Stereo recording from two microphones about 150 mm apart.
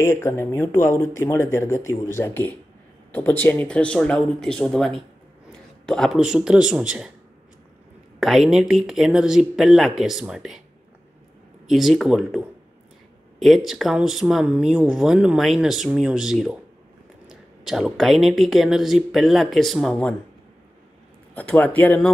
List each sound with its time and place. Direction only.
0.0 s speech: 15° left (ahead or behind); by 7.1 s 5° right (ahead or behind)
8.2 s speech: centre (ahead or behind)
11.6 s speech: centre (ahead or behind)
13.7 s speech: centre (ahead or behind)
21.4 s speech: 10° left (ahead or behind)